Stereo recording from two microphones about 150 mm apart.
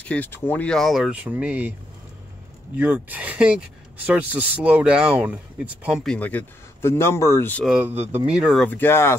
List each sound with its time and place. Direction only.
0.0 s speech: 10° left (ahead or behind); by 1.7 s 10° right (ahead or behind)
2.8 s speech: 10° right (ahead or behind)
6.1 s speech: 10° left (ahead or behind)
7.6 s speech: 5° right (ahead or behind)
8.6 s speech: 15° left (ahead or behind)